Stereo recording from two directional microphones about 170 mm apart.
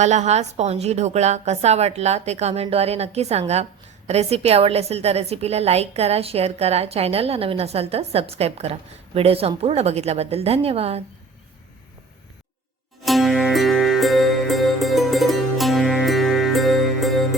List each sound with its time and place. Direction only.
0.0 s a woman's voice: 45° right (ahead or behind)
13.1 s music: centre (ahead or behind)